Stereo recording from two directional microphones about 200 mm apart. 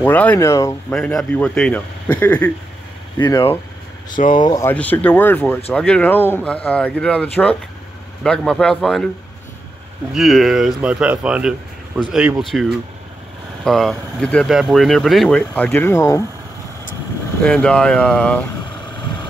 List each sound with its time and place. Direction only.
0.0 s speech: 10° left (ahead or behind)
0.9 s speech: 5° left (ahead or behind)
3.2 s speech: 20° left (ahead or behind)
4.2 s speech: 40° left (ahead or behind)
4.5 s speech: 10° left (ahead or behind)
10.1 s speech: centre (ahead or behind); by 16.3 s 15° left (ahead or behind)
17.4 s speech: 5° left (ahead or behind)